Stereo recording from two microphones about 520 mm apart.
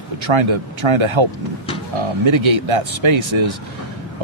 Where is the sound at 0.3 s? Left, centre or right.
Right.